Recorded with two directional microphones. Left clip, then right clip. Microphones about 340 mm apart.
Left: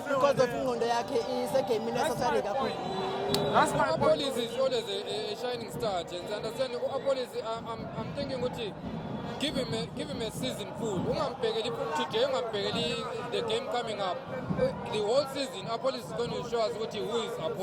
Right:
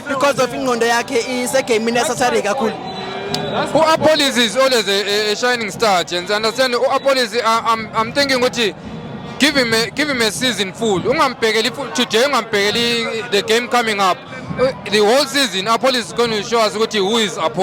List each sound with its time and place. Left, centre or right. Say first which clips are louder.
0.3 s speech: right 13 dB; centre
3.8 s a man's voice: right 14 dB; right